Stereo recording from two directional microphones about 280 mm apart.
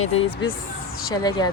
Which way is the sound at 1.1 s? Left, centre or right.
Centre.